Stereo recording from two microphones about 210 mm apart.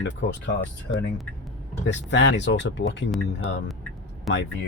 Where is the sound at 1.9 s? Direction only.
55° left (ahead or behind).